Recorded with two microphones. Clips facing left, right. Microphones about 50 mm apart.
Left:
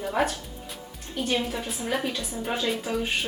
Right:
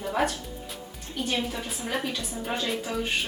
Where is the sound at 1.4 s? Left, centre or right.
Centre.